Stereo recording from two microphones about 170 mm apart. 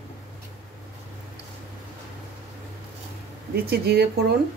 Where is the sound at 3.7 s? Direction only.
70° right (ahead or behind).